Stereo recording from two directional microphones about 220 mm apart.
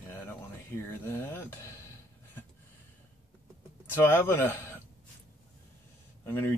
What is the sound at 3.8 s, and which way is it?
Speech, 10° left (ahead or behind).